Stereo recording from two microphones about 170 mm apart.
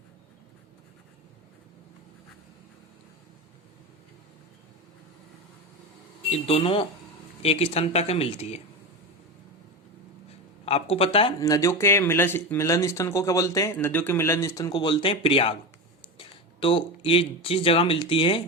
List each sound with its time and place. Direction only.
6.3 s speech: 35° left (ahead or behind)
10.7 s speech: 35° left (ahead or behind)
11.3 s speech: 20° left (ahead or behind)